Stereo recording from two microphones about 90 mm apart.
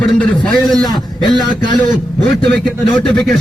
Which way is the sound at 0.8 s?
55° left (ahead or behind).